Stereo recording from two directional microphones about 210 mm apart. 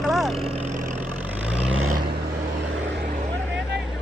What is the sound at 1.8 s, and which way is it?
Vehicle, 90° right.